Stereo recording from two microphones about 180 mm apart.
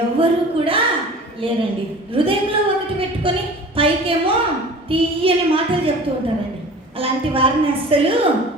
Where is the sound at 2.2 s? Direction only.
30° right (ahead or behind).